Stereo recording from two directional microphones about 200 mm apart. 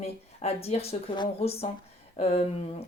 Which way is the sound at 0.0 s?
30° left (ahead or behind).